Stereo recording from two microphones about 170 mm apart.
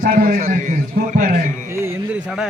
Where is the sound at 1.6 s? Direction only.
15° right (ahead or behind).